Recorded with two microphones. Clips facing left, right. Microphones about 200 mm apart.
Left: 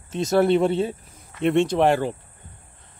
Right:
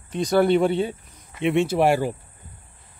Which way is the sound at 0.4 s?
Centre (ahead or behind).